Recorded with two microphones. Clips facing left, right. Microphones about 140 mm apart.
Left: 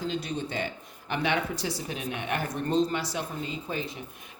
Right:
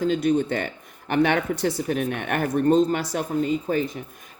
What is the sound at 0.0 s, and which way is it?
Speech, 55° right (ahead or behind).